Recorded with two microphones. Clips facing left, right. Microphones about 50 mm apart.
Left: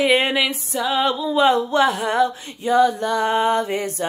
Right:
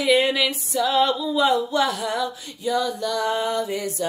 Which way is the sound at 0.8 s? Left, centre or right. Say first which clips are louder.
Even; left.